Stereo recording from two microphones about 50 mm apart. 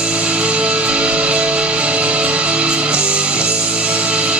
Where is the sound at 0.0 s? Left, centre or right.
Right.